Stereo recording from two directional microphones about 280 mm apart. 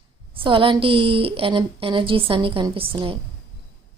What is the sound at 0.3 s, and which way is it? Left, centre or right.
Speech, centre.